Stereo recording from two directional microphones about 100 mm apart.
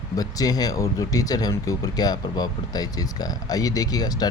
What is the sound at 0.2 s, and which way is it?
Speech, 40° left (ahead or behind).